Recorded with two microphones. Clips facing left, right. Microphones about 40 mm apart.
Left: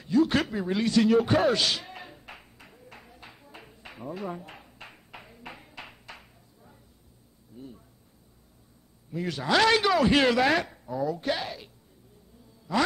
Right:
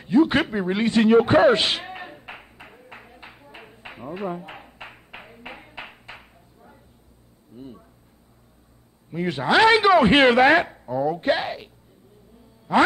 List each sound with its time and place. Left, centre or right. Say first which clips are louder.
0.0 s a sound: right 5 dB; right
7.5 s speech: right 4 dB; right
9.1 s speech: right 5 dB; right